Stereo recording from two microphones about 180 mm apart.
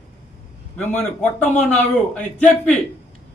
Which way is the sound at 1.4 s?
40° left (ahead or behind).